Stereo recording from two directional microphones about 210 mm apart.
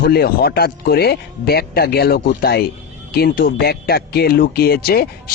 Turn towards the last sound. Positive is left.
turn(degrees=45)  # may be behind; listen again after turning